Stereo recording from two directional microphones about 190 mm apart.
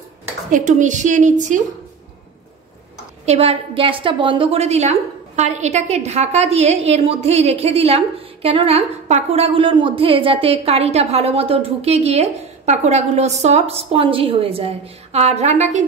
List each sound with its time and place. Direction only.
0.5 s a woman's voice: 40° right (ahead or behind)
3.3 s a woman's voice: 30° right (ahead or behind)